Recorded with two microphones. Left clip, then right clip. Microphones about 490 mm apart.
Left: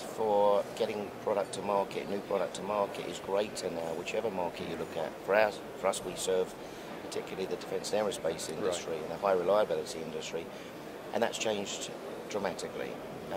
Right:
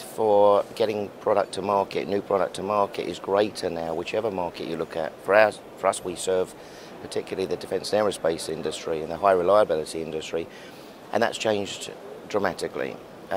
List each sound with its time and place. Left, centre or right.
0.3 s speech: right